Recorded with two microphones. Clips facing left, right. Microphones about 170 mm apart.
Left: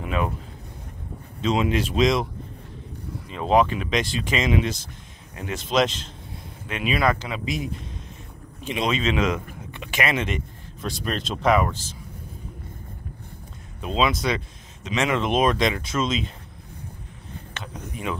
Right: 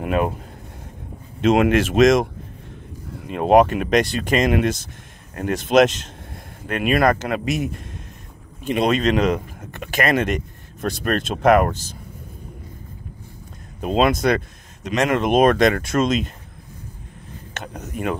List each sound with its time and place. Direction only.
0.0 s speech: 50° right (ahead or behind)
1.4 s speech: 60° right (ahead or behind); by 2.0 s 75° right (ahead or behind)
3.2 s speech: 55° right (ahead or behind)
8.6 s speech: 55° right (ahead or behind)
9.0 s speech: 40° right (ahead or behind); by 11.8 s 55° right (ahead or behind)
13.7 s speech: 50° right (ahead or behind)
17.7 s a sound: 55° right (ahead or behind)